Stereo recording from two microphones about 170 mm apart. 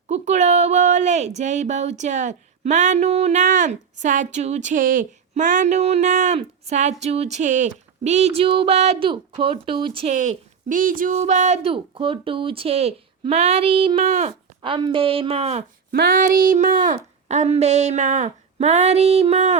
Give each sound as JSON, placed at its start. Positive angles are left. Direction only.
{"t": 0.1, "sound": "speech", "side_deg": -45}
{"t": 10.1, "sound": "speech", "side_deg": -45}
{"t": 15.9, "sound": "speech", "side_deg": -60}